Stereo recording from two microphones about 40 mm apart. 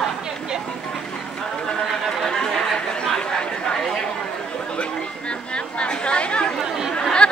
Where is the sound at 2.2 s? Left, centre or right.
Centre.